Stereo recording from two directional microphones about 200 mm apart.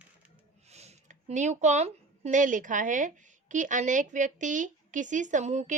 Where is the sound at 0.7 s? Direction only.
35° right (ahead or behind).